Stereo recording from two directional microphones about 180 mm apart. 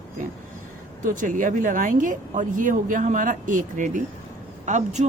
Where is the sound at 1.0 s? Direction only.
45° right (ahead or behind).